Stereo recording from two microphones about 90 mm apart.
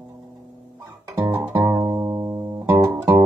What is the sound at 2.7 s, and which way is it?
Music, 40° right (ahead or behind).